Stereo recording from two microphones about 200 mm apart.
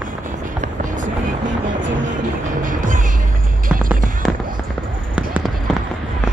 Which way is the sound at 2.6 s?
40° right (ahead or behind).